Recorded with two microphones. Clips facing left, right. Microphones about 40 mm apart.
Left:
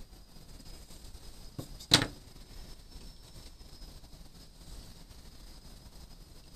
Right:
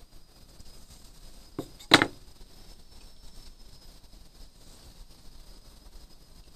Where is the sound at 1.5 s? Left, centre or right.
Right.